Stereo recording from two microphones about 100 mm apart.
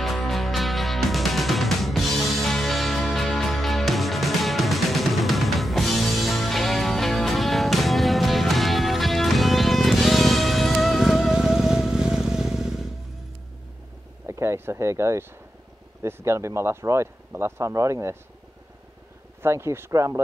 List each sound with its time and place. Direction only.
0.0 s music: centre (ahead or behind)
14.2 s a sound: 25° right (ahead or behind)
16.0 s speech: 25° right (ahead or behind)
19.4 s speech: 25° right (ahead or behind)